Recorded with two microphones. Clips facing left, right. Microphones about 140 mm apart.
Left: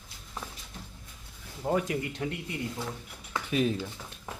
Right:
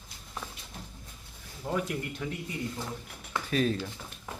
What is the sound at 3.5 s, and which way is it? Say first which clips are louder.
Speech: even; 15° left (ahead or behind).